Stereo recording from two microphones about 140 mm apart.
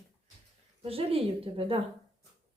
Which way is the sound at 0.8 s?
45° right (ahead or behind).